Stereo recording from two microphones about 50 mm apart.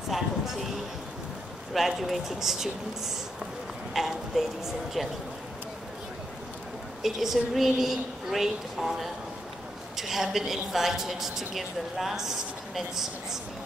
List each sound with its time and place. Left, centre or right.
0.1 s speech: centre
1.7 s speech: centre
7.0 s a woman's voice: centre